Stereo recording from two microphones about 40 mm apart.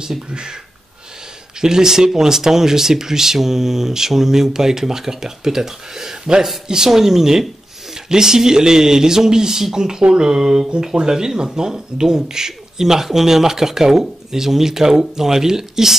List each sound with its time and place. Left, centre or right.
0.3 s speech: right
1.6 s speech: centre